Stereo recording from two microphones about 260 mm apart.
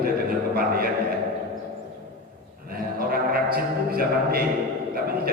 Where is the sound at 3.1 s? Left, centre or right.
Right.